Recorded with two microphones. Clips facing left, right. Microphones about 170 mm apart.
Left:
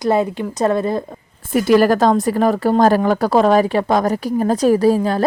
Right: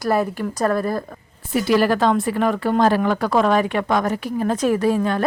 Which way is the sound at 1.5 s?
45° left (ahead or behind).